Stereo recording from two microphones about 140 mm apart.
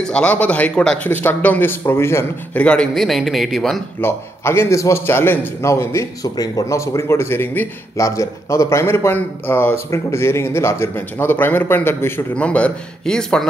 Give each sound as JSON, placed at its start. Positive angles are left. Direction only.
{"t": 0.0, "sound": "a man's voice", "side_deg": 5}
{"t": 4.0, "sound": "a man's voice", "side_deg": 20}